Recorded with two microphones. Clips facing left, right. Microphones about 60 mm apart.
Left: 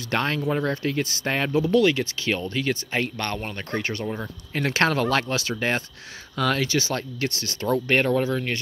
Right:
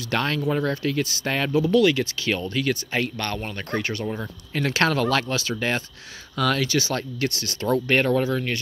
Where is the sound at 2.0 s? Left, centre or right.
Centre.